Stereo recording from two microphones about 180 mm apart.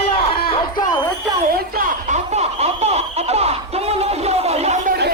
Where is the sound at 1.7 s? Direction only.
50° right (ahead or behind).